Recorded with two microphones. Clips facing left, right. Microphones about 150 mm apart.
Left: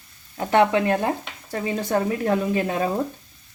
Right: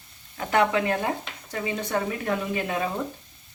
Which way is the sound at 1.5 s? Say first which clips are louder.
Left 4 dB; 35° left (ahead or behind).